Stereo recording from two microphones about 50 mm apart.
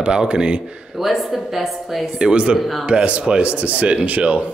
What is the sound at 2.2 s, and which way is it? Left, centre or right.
Speech, right.